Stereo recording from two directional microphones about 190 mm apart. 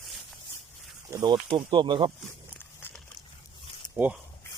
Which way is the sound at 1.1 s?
20° right (ahead or behind).